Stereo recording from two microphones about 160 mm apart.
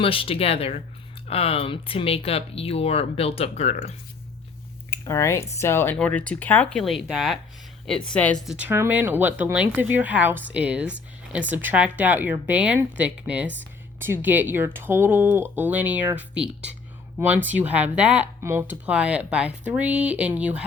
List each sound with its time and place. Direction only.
0.0 s speech: 35° left (ahead or behind)
5.0 s speech: 20° left (ahead or behind)
8.5 s speech: 15° right (ahead or behind)